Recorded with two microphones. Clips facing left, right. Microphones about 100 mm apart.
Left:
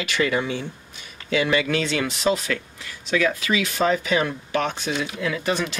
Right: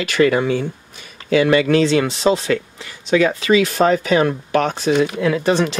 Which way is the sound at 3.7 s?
50° right (ahead or behind).